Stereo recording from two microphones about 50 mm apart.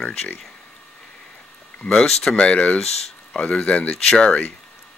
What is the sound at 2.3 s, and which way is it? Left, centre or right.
Speech, left.